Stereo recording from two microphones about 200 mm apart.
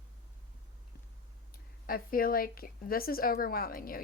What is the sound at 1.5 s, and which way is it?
Speech, 45° left (ahead or behind).